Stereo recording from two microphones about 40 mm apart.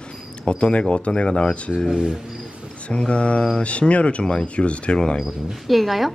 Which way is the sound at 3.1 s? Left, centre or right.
Left.